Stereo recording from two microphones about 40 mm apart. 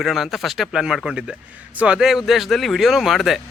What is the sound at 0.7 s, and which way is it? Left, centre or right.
Speech, centre.